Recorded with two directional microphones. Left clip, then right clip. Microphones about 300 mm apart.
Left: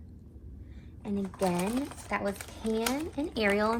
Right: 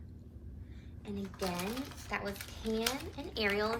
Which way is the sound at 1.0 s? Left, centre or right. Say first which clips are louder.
Left 8 dB; centre.